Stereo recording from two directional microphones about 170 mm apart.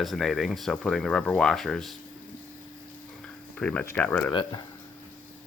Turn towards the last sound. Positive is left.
turn(degrees=30)  # may be behind; listen again after turning